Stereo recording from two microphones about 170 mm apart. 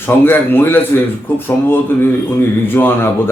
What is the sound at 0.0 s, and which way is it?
A man's voice, 15° left (ahead or behind).